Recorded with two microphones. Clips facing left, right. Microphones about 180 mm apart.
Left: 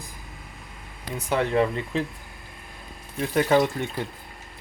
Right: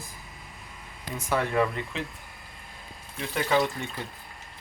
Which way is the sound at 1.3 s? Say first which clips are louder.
Left 3 dB; 25° left (ahead or behind).